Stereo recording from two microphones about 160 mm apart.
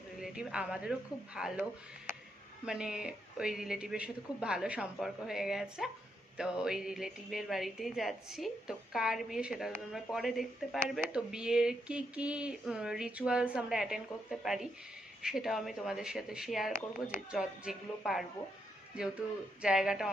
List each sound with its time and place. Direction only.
0.2 s a woman's voice: 5° right (ahead or behind)
2.6 s a woman's voice: 5° right (ahead or behind)
19.6 s a woman's voice: 5° right (ahead or behind)